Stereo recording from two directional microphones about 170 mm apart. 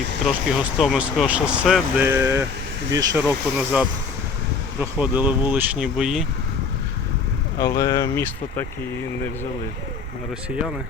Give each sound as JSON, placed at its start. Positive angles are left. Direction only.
{"t": 0.3, "sound": "speech", "side_deg": 0}
{"t": 2.0, "sound": "speech", "side_deg": -15}
{"t": 7.6, "sound": "speech", "side_deg": 20}